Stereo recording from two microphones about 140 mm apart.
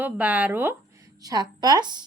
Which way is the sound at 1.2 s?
30° right (ahead or behind).